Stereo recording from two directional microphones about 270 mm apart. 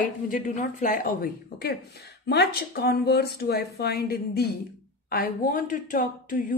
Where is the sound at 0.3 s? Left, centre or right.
Left.